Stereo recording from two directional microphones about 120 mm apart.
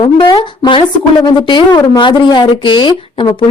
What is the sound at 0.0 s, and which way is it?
Speech, 40° left (ahead or behind).